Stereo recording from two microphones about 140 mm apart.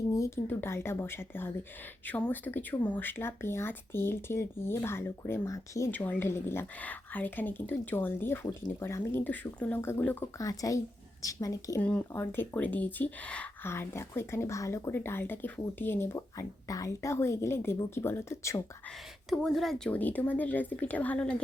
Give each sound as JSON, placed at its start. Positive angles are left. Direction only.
{"t": 0.1, "sound": "speech", "side_deg": 20}
{"t": 10.3, "sound": "speech", "side_deg": 25}
{"t": 11.8, "sound": "speech", "side_deg": 10}
{"t": 19.3, "sound": "speech", "side_deg": 0}